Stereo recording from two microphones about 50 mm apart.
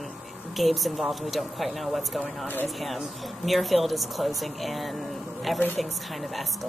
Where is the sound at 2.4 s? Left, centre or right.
Left.